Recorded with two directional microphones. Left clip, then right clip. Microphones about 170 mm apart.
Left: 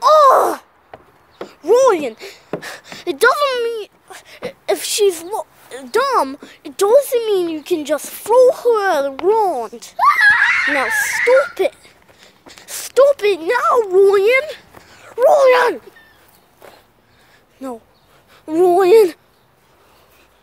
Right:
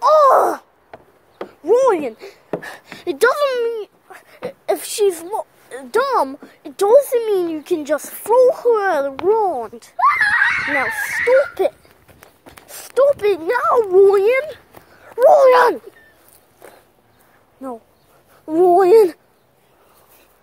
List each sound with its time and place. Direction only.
0.0 s a sound: 5° left (ahead or behind)
2.0 s speech: 10° left (ahead or behind)
3.4 s a child's voice: 15° left (ahead or behind)
9.9 s screaming: 10° right (ahead or behind)
10.8 s speech: 20° left (ahead or behind)
11.2 s a child's voice: 5° left (ahead or behind)
12.6 s a sound: 20° left (ahead or behind)
13.3 s speech: centre (ahead or behind)
15.5 s speech: 20° right (ahead or behind)
18.5 s speech: centre (ahead or behind)